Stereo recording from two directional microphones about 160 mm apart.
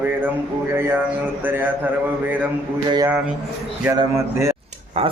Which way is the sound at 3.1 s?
10° right (ahead or behind).